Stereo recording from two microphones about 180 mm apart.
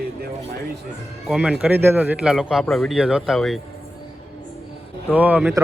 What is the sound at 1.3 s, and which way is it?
Speech, 5° right (ahead or behind).